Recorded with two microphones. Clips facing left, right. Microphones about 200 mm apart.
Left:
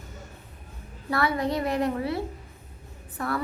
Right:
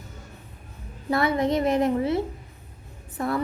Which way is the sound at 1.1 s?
20° right (ahead or behind).